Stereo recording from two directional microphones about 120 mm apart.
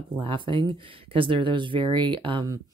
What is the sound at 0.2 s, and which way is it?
Speech, 45° right (ahead or behind).